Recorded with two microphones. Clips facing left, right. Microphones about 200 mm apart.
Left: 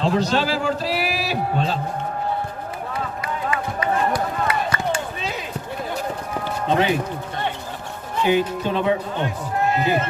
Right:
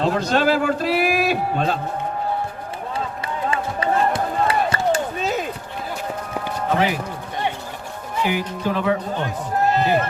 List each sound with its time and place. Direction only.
0.0 s a man's voice: 50° right (ahead or behind)
3.5 s music: 30° right (ahead or behind)
4.9 s chop: 45° right (ahead or behind)
6.7 s music: 25° left (ahead or behind)
8.2 s music: 25° left (ahead or behind)